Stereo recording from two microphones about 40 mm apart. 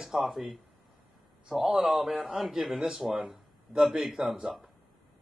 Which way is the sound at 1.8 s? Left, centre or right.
Centre.